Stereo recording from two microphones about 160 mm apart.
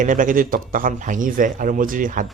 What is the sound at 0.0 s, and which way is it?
Speech, 55° right (ahead or behind).